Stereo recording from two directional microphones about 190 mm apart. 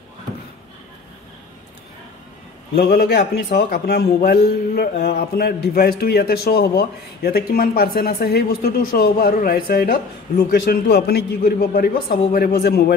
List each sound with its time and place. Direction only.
2.7 s a man's voice: 55° left (ahead or behind)